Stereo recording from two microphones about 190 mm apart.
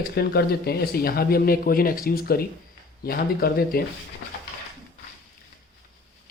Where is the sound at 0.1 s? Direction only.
55° left (ahead or behind).